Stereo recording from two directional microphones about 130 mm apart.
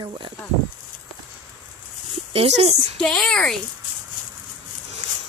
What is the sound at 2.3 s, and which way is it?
Speech, 50° right (ahead or behind).